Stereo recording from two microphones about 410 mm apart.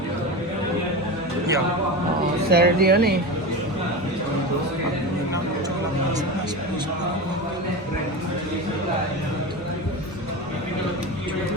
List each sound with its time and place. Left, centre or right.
2.5 s speech: right